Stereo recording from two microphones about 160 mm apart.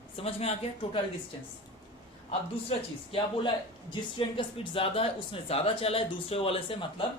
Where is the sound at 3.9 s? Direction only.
30° left (ahead or behind).